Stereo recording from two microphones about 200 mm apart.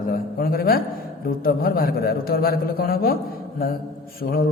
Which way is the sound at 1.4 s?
45° left (ahead or behind).